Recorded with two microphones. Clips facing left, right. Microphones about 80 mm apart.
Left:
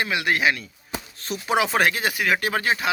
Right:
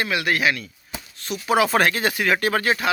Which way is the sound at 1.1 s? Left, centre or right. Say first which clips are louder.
Right 3 dB; left.